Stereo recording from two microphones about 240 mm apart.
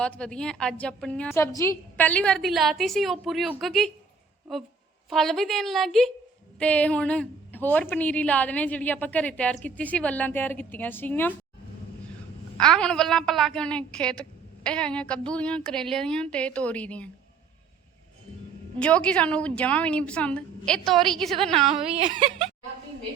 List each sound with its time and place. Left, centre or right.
0.0 s a woman's voice: centre
12.5 s a woman's voice: centre
18.8 s a woman's voice: centre
21.9 s speech: right